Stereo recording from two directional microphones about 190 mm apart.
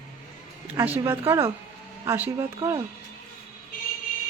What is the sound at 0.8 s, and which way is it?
A woman's voice, 10° right (ahead or behind).